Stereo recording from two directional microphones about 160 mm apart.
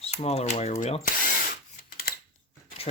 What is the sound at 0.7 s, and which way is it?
Speech, 45° left (ahead or behind).